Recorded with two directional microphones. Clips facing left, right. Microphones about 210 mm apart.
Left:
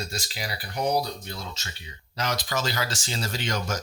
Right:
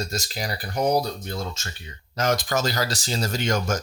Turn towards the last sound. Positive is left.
turn(degrees=-50)  # may be behind; listen again after turning